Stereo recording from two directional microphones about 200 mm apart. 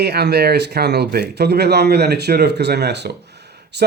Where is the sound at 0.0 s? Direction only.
55° right (ahead or behind).